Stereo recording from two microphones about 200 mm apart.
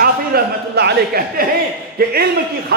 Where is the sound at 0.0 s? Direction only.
50° right (ahead or behind).